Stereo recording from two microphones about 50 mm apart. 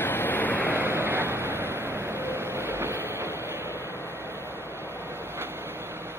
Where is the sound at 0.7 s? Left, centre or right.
Right.